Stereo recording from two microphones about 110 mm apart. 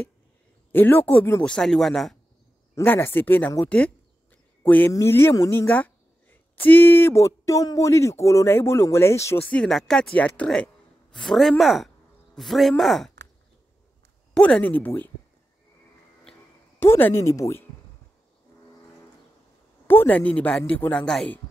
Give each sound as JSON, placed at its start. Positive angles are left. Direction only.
{"t": 0.7, "sound": "speech", "side_deg": 15}
{"t": 2.7, "sound": "a woman's voice", "side_deg": 20}
{"t": 9.4, "sound": "speech", "side_deg": 10}
{"t": 14.3, "sound": "speech", "side_deg": 10}
{"t": 16.8, "sound": "a woman's voice", "side_deg": 25}
{"t": 19.9, "sound": "speech", "side_deg": 15}